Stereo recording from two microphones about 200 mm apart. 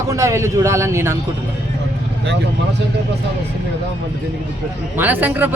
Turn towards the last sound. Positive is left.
turn(degrees=-10)  # may be behind; listen again after turning